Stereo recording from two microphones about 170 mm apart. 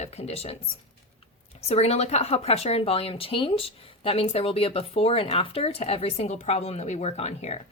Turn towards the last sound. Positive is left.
turn(degrees=40)  # may be behind; listen again after turning